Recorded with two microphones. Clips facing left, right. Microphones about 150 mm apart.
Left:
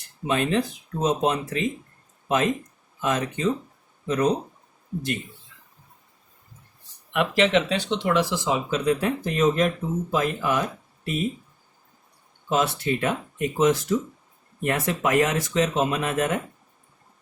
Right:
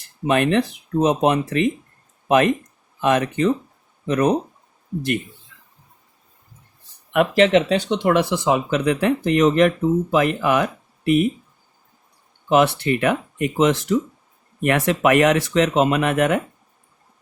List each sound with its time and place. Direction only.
0.3 s speech: 65° right (ahead or behind)
7.1 s speech: 50° right (ahead or behind); by 11.3 s 70° right (ahead or behind)
12.5 s speech: 70° right (ahead or behind)